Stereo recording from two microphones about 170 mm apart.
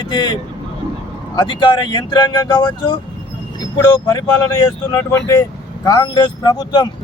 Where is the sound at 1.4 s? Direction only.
25° left (ahead or behind).